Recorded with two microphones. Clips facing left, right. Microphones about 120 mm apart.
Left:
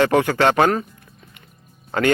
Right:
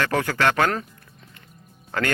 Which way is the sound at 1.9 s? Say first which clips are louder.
Left 6 dB; 20° left (ahead or behind).